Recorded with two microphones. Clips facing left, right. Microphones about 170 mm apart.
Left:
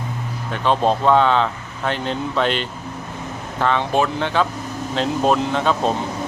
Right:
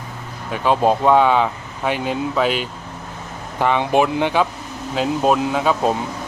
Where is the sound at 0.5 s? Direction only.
10° right (ahead or behind).